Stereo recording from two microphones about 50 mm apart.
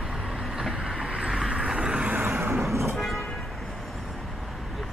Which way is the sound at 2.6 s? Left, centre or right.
Centre.